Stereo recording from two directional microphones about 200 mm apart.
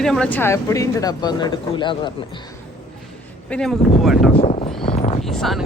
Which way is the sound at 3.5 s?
5° left (ahead or behind).